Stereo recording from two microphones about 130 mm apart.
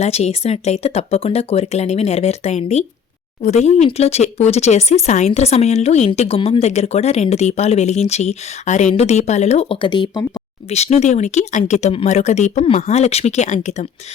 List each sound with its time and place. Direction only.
0.0 s speech: 55° left (ahead or behind)
6.1 s speech: 45° left (ahead or behind)
9.8 s speech: 35° left (ahead or behind)
10.7 s speech: 55° left (ahead or behind)